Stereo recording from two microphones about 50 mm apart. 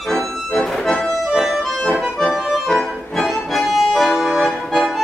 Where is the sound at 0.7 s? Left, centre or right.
Centre.